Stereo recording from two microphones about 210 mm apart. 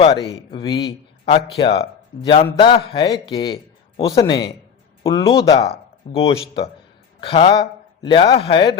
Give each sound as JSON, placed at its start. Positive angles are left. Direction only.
{"t": 0.0, "sound": "a man's voice", "side_deg": 25}